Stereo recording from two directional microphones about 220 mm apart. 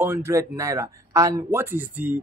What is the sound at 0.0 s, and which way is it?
Speech, 10° right (ahead or behind).